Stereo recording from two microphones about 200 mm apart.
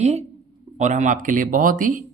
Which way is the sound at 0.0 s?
35° right (ahead or behind).